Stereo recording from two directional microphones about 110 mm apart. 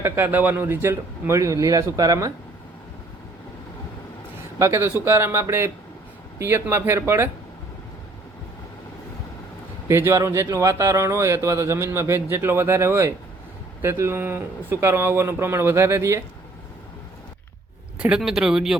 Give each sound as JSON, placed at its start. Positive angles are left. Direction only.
{"t": 0.0, "sound": "speech", "side_deg": -20}
{"t": 4.5, "sound": "speech", "side_deg": -25}
{"t": 9.9, "sound": "speech", "side_deg": -25}
{"t": 18.2, "sound": "speech", "side_deg": -5}